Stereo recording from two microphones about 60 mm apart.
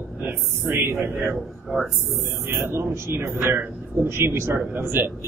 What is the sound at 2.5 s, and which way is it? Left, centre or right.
A man's voice, right.